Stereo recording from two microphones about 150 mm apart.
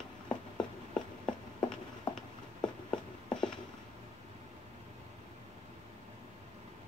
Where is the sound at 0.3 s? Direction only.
30° left (ahead or behind).